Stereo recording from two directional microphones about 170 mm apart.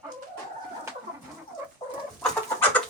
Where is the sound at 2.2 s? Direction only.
10° left (ahead or behind).